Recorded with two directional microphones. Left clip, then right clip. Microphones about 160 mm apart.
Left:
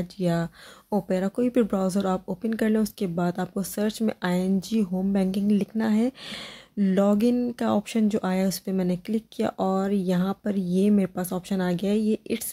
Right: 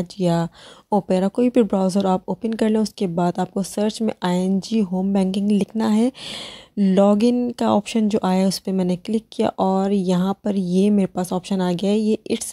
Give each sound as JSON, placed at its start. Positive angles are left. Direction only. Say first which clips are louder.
{"t": 0.0, "sound": "speech", "louder": "right 6 dB", "side_deg": -30}